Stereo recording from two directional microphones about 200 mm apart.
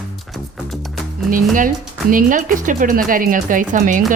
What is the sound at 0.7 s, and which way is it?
Music, centre (ahead or behind).